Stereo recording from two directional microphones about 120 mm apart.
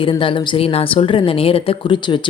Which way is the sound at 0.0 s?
45° left (ahead or behind).